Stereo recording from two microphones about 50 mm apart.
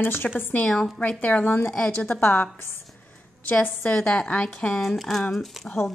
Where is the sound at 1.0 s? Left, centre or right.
Left.